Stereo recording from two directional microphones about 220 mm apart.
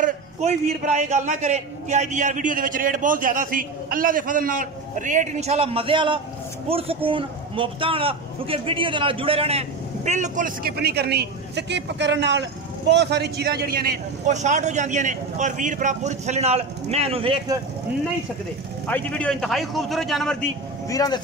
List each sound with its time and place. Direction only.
0.0 s a man's voice: 30° right (ahead or behind)
18.9 s a man's voice: 5° left (ahead or behind)
20.9 s speech: 15° left (ahead or behind)